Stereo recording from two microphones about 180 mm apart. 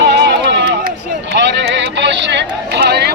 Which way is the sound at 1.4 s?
80° right.